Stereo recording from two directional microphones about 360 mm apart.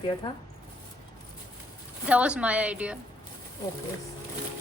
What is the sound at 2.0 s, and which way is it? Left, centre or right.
Speech, centre.